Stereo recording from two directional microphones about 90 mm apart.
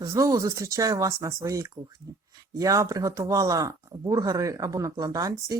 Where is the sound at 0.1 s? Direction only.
40° right (ahead or behind).